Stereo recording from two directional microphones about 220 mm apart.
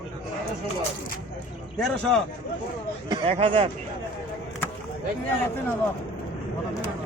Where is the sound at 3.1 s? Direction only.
25° right (ahead or behind).